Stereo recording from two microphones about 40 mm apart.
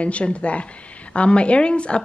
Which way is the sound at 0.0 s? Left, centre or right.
Left.